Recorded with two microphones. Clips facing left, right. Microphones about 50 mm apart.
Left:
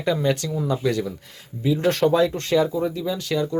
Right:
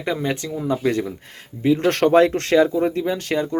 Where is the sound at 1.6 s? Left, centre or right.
Right.